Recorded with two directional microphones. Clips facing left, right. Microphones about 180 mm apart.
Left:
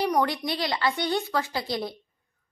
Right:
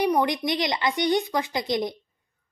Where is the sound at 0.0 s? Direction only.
15° right (ahead or behind).